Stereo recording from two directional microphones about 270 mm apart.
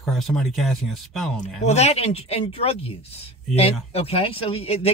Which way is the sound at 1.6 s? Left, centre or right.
Left.